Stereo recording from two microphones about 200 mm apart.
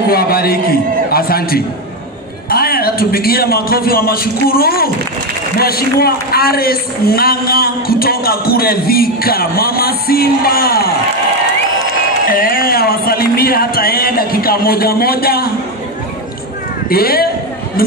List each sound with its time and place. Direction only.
0.1 s a man's voice: 50° left (ahead or behind)
12.3 s a man's voice: 45° left (ahead or behind)
16.9 s a man's voice: 50° left (ahead or behind)